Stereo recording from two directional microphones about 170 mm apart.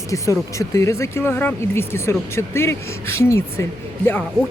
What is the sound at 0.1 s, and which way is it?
Speech, 20° left (ahead or behind).